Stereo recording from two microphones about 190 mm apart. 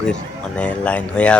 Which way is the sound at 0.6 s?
5° left (ahead or behind).